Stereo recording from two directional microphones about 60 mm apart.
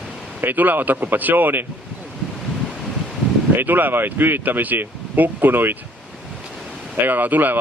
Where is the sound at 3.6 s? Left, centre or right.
Right.